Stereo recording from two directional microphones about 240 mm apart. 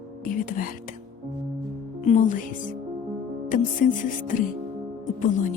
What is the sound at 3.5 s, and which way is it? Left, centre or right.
Speech, left.